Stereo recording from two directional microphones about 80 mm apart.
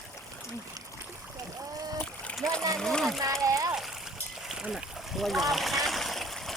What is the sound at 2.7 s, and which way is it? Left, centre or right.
Speech, centre.